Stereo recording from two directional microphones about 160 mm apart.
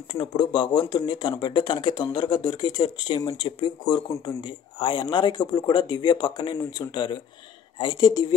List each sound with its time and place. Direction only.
0.1 s speech: 30° left (ahead or behind)